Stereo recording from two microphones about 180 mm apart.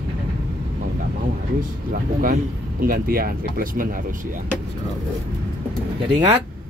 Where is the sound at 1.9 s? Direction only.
55° right (ahead or behind).